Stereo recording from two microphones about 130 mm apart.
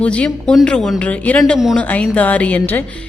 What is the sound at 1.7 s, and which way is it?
A woman's voice, 10° left (ahead or behind).